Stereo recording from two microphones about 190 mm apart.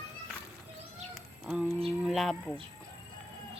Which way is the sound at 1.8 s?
Centre (ahead or behind).